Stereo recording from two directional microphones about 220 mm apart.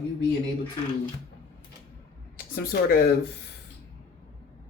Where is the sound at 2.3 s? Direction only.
40° left (ahead or behind).